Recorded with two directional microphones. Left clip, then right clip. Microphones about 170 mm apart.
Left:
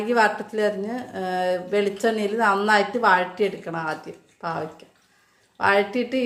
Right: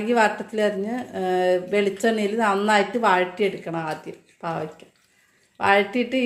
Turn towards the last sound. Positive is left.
turn(degrees=-20)  # may be behind; listen again after turning